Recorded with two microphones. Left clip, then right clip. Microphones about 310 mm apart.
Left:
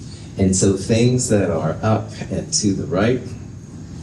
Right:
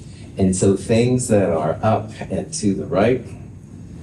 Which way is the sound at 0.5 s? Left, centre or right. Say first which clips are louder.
Right 1 dB; right.